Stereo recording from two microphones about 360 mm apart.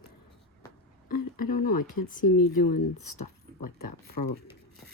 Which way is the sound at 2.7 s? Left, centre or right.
Left.